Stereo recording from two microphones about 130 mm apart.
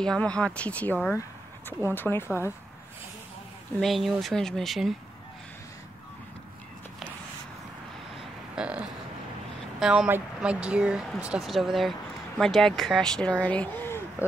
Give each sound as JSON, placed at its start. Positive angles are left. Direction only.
{"t": 0.0, "sound": "speech", "side_deg": 5}
{"t": 3.8, "sound": "speech", "side_deg": 0}
{"t": 8.5, "sound": "a sound", "side_deg": -5}
{"t": 9.8, "sound": "speech", "side_deg": -5}